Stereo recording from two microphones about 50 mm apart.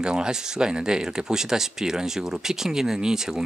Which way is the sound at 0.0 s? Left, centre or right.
Centre.